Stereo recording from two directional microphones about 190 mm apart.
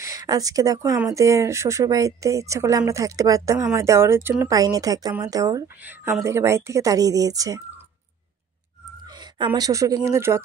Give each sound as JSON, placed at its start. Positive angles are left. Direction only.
{"t": 0.0, "sound": "speech", "side_deg": -20}
{"t": 9.0, "sound": "a sound", "side_deg": -20}
{"t": 10.0, "sound": "speech", "side_deg": -15}